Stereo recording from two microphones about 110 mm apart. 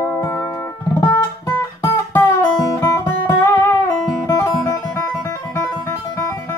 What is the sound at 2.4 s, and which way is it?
Guitar, 35° left (ahead or behind).